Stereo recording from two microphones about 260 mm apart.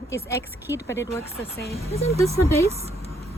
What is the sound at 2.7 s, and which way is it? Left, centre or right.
Vehicle, right.